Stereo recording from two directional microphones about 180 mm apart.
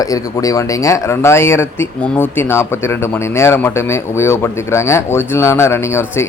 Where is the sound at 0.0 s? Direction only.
20° left (ahead or behind).